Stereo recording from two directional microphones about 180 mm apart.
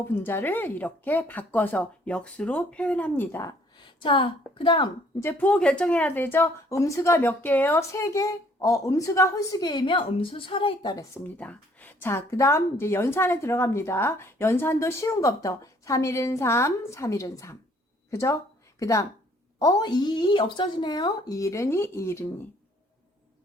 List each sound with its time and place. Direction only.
0.0 s a woman's voice: 10° left (ahead or behind)
3.8 s speech: 25° left (ahead or behind)
5.2 s a woman's voice: 10° left (ahead or behind)